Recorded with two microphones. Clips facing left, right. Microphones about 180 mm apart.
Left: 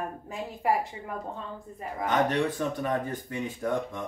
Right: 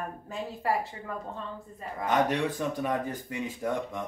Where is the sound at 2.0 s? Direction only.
10° right (ahead or behind).